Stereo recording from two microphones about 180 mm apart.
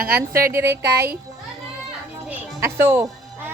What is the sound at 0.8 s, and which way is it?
Speech, 60° right (ahead or behind).